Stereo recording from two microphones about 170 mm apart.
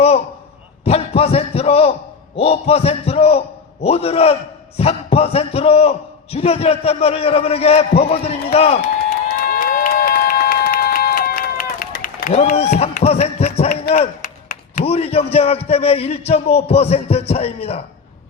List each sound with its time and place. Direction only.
0.9 s a man's voice: 35° left (ahead or behind)
9.4 s crowd: 55° left (ahead or behind)
12.3 s a man's voice: 40° left (ahead or behind)
13.9 s a sound: 50° left (ahead or behind)
14.8 s a man's voice: 35° left (ahead or behind)